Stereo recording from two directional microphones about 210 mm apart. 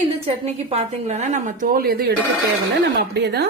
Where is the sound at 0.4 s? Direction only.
30° right (ahead or behind).